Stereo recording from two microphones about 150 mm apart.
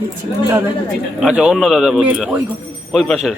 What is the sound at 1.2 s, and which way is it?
A man's voice, 5° right (ahead or behind).